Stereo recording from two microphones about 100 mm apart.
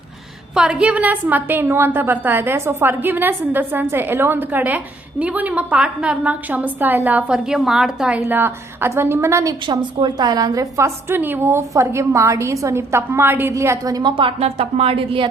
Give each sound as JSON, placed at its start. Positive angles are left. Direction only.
{"t": 0.5, "sound": "a woman's voice", "side_deg": -5}
{"t": 7.3, "sound": "a woman's voice", "side_deg": -5}
{"t": 8.3, "sound": "a woman's voice", "side_deg": -20}
{"t": 9.6, "sound": "a woman's voice", "side_deg": -45}
{"t": 13.5, "sound": "a woman's voice", "side_deg": -30}
{"t": 14.2, "sound": "speech", "side_deg": -75}